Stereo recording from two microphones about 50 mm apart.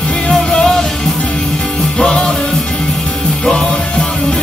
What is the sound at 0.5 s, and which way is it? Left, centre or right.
Music, centre.